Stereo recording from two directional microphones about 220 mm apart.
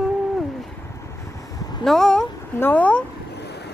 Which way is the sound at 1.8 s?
Centre (ahead or behind).